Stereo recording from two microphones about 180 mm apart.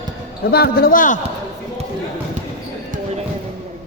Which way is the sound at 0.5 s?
60° left (ahead or behind).